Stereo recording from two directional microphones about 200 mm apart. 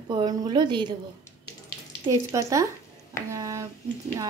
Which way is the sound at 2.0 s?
15° right (ahead or behind).